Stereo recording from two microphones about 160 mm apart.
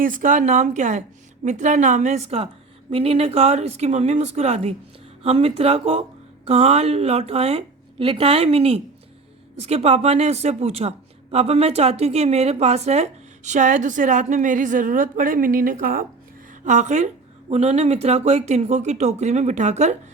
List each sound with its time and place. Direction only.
0.0 s speech: 55° right (ahead or behind)
16.6 s speech: 45° right (ahead or behind)